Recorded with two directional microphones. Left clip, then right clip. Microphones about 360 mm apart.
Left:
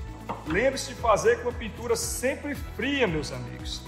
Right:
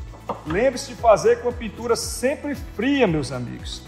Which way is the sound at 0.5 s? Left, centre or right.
Right.